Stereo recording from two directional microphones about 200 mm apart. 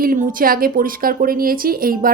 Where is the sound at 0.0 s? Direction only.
45° right (ahead or behind).